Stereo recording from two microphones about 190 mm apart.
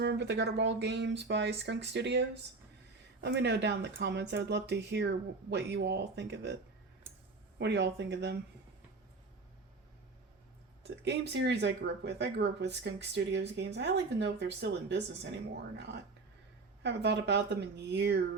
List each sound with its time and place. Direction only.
0.0 s speech: 65° right (ahead or behind)
7.1 s a sound: 10° right (ahead or behind)
7.6 s speech: 65° right (ahead or behind)
10.8 s speech: 65° right (ahead or behind)
16.8 s speech: 65° right (ahead or behind)